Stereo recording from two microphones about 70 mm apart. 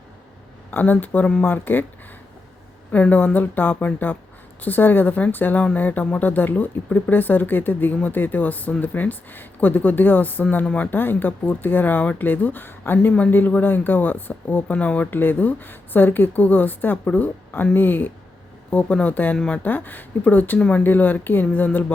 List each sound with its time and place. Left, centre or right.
0.7 s speech: left
2.9 s speech: left